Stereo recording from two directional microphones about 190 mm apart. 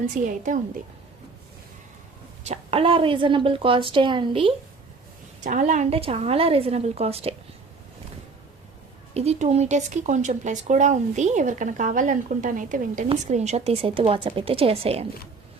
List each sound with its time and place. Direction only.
0.3 s a woman's voice: 45° right (ahead or behind)
2.4 s a woman's voice: 35° right (ahead or behind)
5.4 s speech: 40° right (ahead or behind)
9.1 s speech: 35° right (ahead or behind)